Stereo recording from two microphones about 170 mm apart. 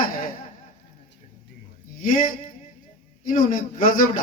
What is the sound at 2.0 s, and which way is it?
A man's voice, 55° left (ahead or behind).